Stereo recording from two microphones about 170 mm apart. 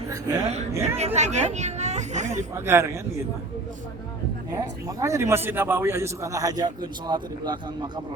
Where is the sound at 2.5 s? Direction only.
15° right (ahead or behind).